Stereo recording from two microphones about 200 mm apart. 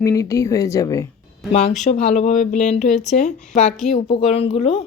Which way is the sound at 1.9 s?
35° left (ahead or behind).